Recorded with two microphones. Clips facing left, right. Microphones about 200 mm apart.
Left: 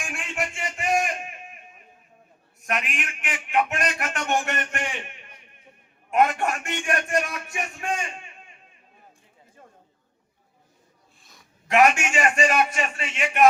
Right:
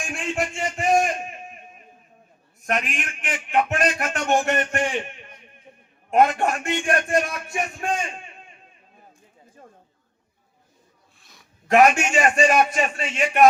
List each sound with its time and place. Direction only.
0.1 s a sound: 30° right (ahead or behind)
2.9 s a man's voice: 40° right (ahead or behind)
6.1 s a man's voice: 35° right (ahead or behind)
11.7 s a man's voice: 35° right (ahead or behind)